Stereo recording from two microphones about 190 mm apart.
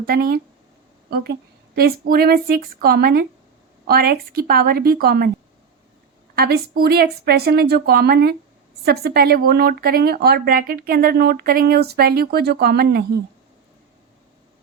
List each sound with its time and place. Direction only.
0.0 s a woman's voice: 50° right (ahead or behind)
6.3 s speech: 55° right (ahead or behind)